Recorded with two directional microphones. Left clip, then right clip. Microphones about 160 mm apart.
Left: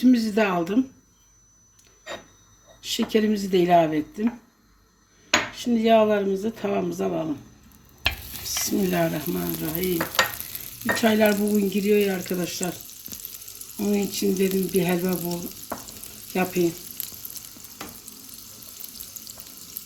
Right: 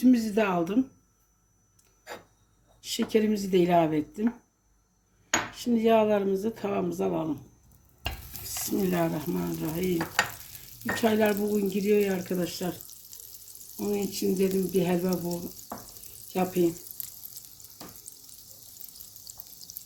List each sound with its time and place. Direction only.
0.0 s speech: 5° right (ahead or behind)
2.8 s speech: 10° right (ahead or behind)
5.5 s speech: 10° right (ahead or behind)
8.8 s speech: 5° left (ahead or behind)
13.7 s speech: 5° left (ahead or behind)
17.0 s frying: 15° right (ahead or behind)